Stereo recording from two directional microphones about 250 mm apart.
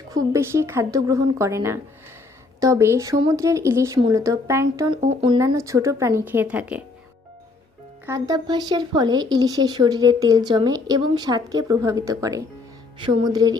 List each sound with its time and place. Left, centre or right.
0.1 s speech: centre
4.9 s speech: right; by 6.8 s centre
8.0 s speech: centre